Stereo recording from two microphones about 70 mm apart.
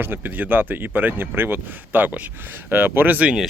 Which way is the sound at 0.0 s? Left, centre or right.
Right.